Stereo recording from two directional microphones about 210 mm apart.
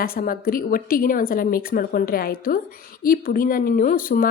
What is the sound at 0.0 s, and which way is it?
Speech, 45° left (ahead or behind).